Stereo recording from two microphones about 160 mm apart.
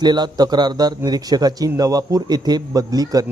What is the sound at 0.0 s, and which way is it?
A man's voice, 25° right (ahead or behind).